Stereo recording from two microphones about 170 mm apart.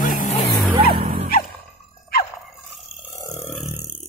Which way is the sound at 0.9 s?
65° right (ahead or behind).